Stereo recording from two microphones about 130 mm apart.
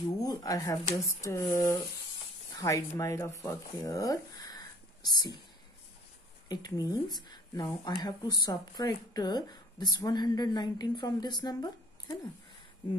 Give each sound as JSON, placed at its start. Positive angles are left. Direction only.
{"t": 0.2, "sound": "a woman's voice", "side_deg": 30}
{"t": 6.5, "sound": "a woman's voice", "side_deg": 30}